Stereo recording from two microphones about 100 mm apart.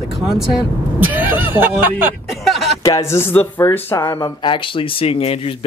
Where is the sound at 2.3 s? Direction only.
Centre (ahead or behind).